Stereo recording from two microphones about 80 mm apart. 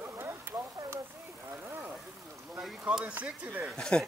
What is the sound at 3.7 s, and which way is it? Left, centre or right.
Speech, centre.